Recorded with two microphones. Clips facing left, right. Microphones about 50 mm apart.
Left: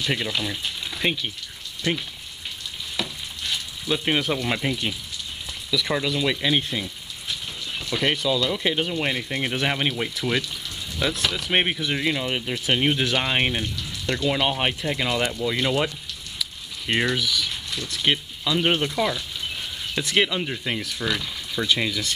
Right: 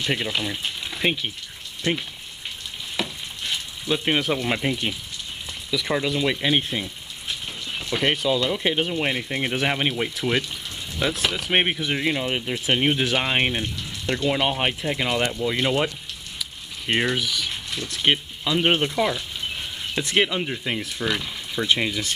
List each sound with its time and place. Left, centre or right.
0.0 s speech: centre
3.0 s frying: centre
5.7 s speech: centre
20.8 s speech: centre